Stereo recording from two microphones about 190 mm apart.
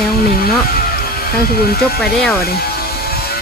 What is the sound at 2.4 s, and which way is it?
Vehicle, 55° left (ahead or behind).